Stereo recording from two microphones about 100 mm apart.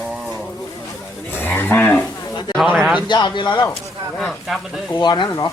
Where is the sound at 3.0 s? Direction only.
50° left (ahead or behind).